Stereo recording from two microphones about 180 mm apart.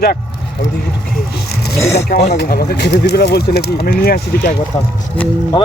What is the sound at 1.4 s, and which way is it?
Vehicle, 60° left (ahead or behind).